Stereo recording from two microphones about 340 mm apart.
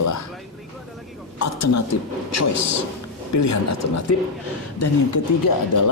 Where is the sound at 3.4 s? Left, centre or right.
Left.